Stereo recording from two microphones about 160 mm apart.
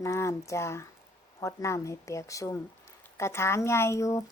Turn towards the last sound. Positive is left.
turn(degrees=20)  # may be behind; listen again after turning